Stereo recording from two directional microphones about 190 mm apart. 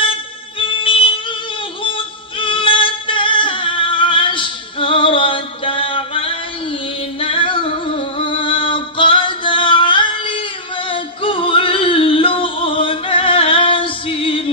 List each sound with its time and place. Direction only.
0.6 s music: 25° left (ahead or behind)
7.2 s singing: 30° left (ahead or behind)
10.9 s music: 30° left (ahead or behind)